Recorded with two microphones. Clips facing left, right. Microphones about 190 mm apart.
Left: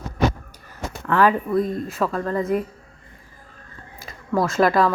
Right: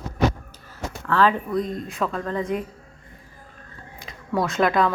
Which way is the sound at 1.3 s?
5° left (ahead or behind).